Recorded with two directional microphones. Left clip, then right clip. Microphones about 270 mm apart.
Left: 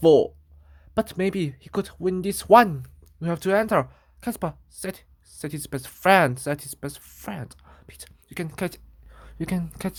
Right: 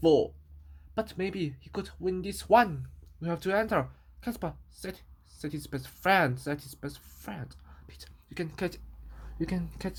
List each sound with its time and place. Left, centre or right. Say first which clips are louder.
0.0 s speech: left 7 dB; left